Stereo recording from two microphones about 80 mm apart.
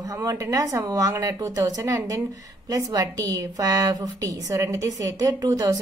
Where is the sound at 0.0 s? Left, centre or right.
Right.